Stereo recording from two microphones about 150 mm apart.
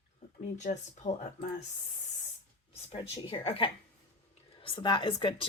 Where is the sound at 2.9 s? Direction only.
35° left (ahead or behind).